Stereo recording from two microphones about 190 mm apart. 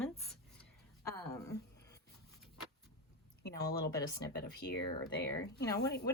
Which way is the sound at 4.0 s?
20° left (ahead or behind).